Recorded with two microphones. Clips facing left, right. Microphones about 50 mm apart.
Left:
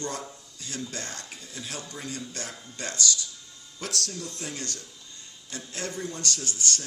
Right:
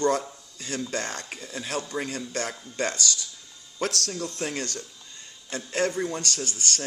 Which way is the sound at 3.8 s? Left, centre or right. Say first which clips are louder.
Right 5 dB; right.